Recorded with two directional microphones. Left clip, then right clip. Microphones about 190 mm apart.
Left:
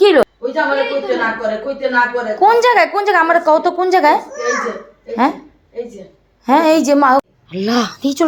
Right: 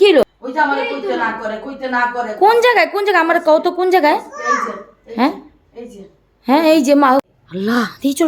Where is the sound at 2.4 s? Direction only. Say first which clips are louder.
Left 1 dB; 20° right (ahead or behind).